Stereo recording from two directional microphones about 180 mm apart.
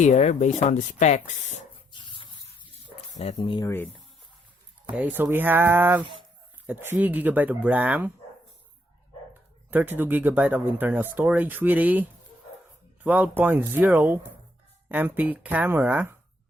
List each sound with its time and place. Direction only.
0.0 s speech: 40° left (ahead or behind)
1.9 s spray: 25° left (ahead or behind)
3.3 s speech: 25° left (ahead or behind)
3.7 s speech: 10° left (ahead or behind)
4.9 s speech: 10° right (ahead or behind)
9.6 s speech: 10° right (ahead or behind)